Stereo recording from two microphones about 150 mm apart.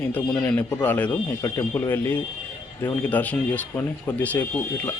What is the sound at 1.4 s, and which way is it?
Speech, 25° left (ahead or behind).